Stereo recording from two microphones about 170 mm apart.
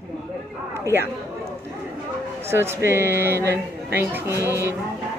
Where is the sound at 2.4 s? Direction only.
15° right (ahead or behind).